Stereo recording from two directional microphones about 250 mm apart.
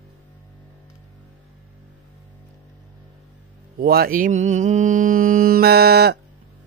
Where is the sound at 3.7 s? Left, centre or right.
Right.